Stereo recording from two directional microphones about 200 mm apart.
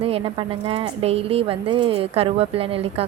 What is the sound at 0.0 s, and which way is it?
Speech, 25° right (ahead or behind).